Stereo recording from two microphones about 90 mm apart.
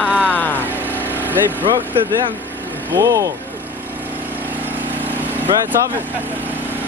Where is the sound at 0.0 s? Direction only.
10° right (ahead or behind).